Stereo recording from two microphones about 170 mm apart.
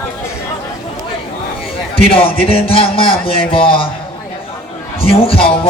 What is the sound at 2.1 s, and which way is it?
Speech, 35° left (ahead or behind).